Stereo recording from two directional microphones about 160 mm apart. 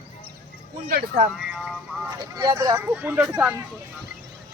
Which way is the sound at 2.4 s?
25° right (ahead or behind).